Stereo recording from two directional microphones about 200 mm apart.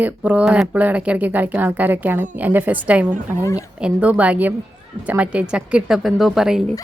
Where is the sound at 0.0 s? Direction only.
5° right (ahead or behind).